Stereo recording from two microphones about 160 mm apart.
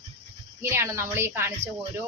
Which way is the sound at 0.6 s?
15° right (ahead or behind).